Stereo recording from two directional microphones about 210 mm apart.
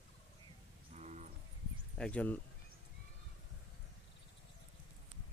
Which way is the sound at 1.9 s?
5° left (ahead or behind).